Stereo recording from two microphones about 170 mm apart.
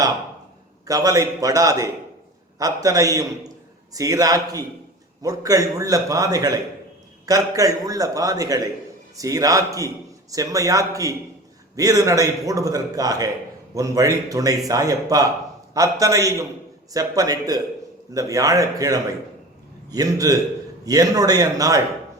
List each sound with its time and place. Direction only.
0.9 s a man's voice: 20° right (ahead or behind)